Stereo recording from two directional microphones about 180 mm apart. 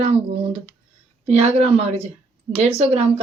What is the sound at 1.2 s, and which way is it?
Speech, 35° right (ahead or behind).